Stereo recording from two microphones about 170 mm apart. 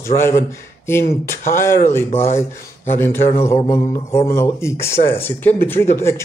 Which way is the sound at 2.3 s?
15° left (ahead or behind).